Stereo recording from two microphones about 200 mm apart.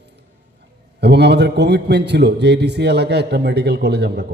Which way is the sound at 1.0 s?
55° right (ahead or behind).